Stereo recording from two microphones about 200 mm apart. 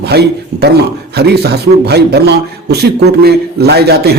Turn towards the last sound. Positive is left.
turn(degrees=-55)  # may be behind; listen again after turning